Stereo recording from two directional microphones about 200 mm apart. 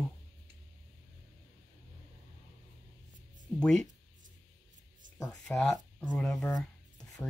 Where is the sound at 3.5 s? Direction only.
5° left (ahead or behind).